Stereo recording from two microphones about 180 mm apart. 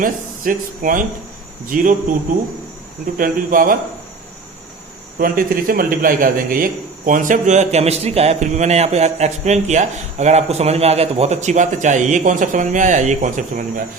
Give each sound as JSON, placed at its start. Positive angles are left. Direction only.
{"t": 0.0, "sound": "speech", "side_deg": -50}
{"t": 3.2, "sound": "speech", "side_deg": -50}
{"t": 5.2, "sound": "a man's voice", "side_deg": -50}